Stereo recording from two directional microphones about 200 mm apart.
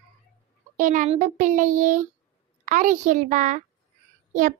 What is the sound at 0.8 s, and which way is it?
A child's voice, 40° right (ahead or behind).